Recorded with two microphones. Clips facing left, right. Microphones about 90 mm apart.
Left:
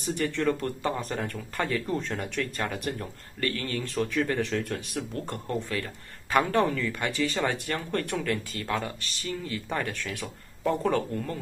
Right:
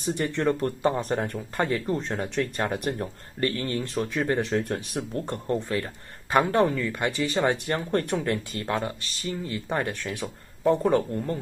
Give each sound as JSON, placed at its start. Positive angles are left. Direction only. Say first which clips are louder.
{"t": 0.0, "sound": "speech", "louder": "right 2 dB", "side_deg": -30}